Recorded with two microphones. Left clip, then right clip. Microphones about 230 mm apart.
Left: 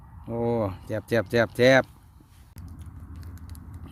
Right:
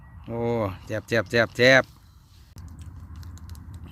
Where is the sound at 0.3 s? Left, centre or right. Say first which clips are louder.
Even; centre.